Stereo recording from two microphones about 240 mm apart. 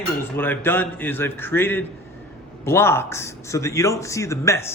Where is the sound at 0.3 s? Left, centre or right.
Centre.